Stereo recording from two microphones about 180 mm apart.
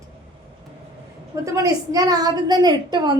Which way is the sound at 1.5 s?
20° right (ahead or behind).